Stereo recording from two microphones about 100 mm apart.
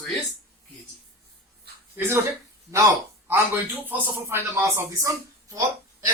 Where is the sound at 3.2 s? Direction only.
25° right (ahead or behind).